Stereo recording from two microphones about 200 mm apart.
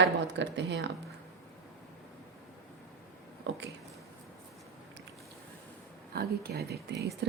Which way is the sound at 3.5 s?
65° right (ahead or behind).